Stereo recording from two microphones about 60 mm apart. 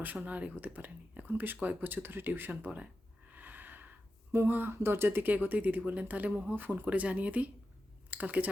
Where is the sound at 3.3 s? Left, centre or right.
Right.